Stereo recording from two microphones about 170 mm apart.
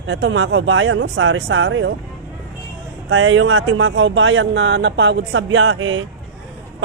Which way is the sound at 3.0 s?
90° right.